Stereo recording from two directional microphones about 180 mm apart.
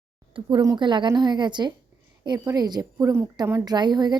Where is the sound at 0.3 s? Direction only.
25° right (ahead or behind).